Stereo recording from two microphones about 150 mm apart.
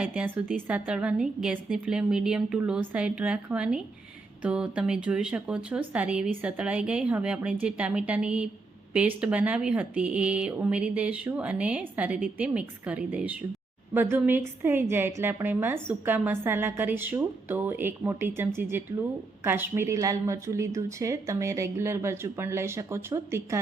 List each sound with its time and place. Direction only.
0.0 s a woman's voice: 5° right (ahead or behind)